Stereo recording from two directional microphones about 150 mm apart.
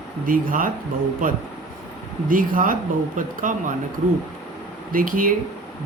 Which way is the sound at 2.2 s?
65° right (ahead or behind).